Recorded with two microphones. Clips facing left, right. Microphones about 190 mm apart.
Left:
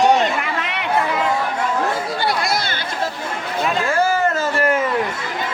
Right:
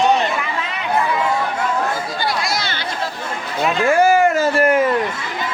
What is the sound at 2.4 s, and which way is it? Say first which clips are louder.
Chatter: left 1 dB; 55° left (ahead or behind).